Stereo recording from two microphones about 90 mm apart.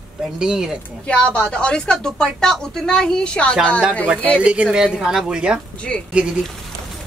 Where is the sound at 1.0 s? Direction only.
10° left (ahead or behind).